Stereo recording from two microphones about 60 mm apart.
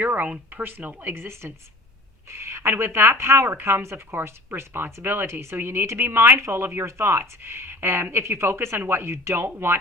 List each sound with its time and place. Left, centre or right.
0.0 s speech: right
1.1 s speech: right